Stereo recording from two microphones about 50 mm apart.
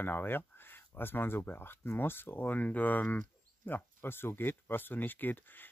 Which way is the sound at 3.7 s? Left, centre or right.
Left.